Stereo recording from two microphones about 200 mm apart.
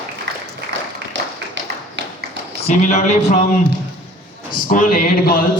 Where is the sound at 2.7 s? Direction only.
35° left (ahead or behind).